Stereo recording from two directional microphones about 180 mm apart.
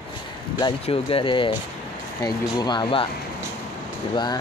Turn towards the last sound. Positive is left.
turn(degrees=25)  # may be behind; listen again after turning